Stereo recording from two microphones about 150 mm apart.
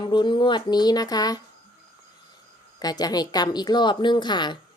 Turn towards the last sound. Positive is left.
turn(degrees=30)  # may be behind; listen again after turning